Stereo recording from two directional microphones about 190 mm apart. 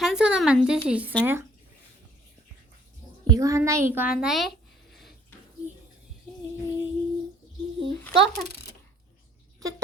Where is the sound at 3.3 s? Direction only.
15° right (ahead or behind); by 4.5 s centre (ahead or behind).